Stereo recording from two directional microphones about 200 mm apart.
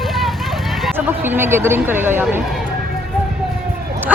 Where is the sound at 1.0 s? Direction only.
10° right (ahead or behind).